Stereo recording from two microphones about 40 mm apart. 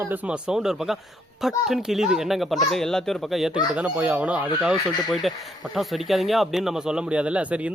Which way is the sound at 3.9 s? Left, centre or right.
Right.